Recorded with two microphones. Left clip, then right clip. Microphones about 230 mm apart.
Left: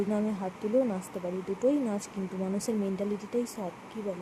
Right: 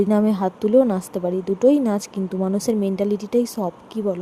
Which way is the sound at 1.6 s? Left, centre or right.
Right.